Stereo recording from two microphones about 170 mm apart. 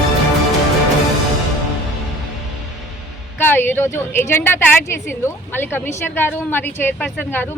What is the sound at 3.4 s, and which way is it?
A woman's voice, 10° left (ahead or behind).